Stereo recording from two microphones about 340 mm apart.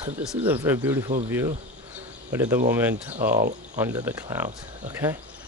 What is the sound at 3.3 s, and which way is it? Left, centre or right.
Speech, right.